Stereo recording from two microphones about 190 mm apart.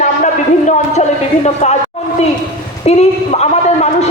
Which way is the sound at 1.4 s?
35° left (ahead or behind).